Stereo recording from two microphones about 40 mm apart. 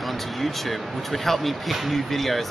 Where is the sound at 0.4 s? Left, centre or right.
Centre.